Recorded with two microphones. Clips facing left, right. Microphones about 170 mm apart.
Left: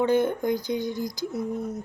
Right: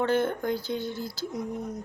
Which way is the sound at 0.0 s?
15° left (ahead or behind).